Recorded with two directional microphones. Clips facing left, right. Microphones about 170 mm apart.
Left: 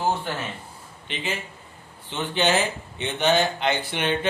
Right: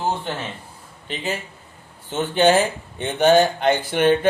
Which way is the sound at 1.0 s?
40° right (ahead or behind).